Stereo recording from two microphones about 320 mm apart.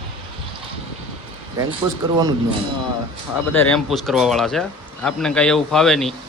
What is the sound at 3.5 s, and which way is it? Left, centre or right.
Speech, centre.